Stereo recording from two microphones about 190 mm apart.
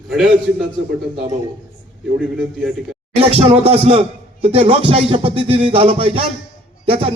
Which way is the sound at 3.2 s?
30° right (ahead or behind).